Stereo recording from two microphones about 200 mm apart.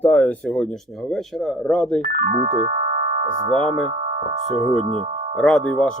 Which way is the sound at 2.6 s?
40° right (ahead or behind).